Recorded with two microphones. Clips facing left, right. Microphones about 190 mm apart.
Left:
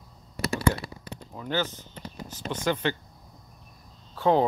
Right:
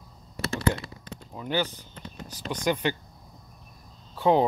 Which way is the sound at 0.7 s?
20° right (ahead or behind).